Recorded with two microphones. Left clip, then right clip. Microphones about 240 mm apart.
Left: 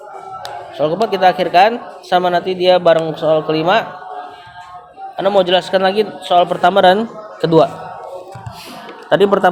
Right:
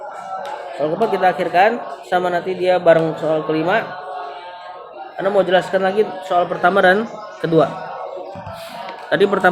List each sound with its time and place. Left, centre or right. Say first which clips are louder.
0.8 s speech: left 3 dB; left
5.1 s a man's voice: left 3 dB; left
9.0 s speech: left 4 dB; left